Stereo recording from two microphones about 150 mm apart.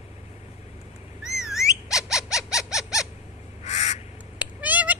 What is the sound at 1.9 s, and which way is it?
Bird, 5° right (ahead or behind).